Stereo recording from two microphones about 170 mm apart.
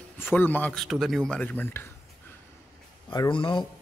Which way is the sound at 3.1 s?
25° left (ahead or behind).